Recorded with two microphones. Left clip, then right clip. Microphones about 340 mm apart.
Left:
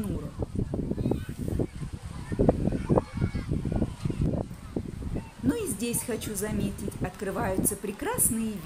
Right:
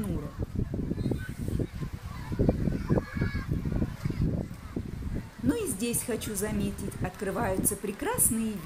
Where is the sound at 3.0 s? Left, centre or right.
Left.